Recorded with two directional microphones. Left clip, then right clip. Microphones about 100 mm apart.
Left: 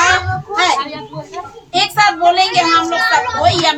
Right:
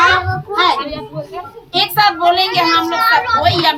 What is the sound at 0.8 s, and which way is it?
Speech, 5° left (ahead or behind).